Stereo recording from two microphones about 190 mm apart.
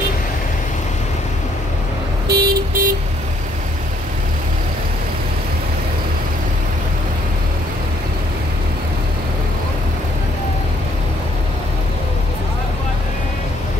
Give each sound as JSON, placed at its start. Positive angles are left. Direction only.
{"t": 2.2, "sound": "vehicle", "side_deg": -50}